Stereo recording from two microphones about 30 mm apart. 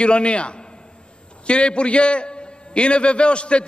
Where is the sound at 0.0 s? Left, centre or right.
Left.